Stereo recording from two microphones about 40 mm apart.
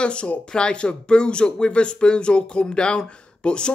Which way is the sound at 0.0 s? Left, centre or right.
Left.